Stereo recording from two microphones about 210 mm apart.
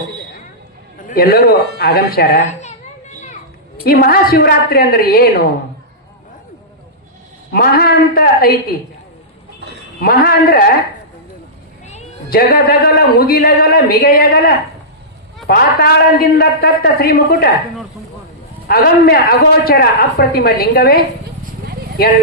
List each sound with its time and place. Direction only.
1.0 s a man's voice: 45° left (ahead or behind)
2.5 s a sound: 35° left (ahead or behind)
3.8 s speech: 45° left (ahead or behind)
7.5 s speech: 45° left (ahead or behind)
10.0 s speech: 45° left (ahead or behind)
12.3 s speech: 45° left (ahead or behind)
18.7 s speech: 45° left (ahead or behind)